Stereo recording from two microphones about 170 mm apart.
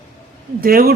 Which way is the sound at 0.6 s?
60° right (ahead or behind).